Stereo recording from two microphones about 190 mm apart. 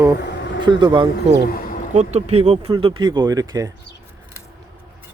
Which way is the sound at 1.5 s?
50° left (ahead or behind).